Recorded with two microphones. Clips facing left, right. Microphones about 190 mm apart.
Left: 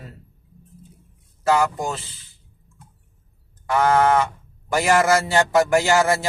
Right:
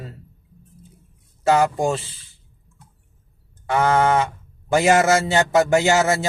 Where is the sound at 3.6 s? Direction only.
25° right (ahead or behind).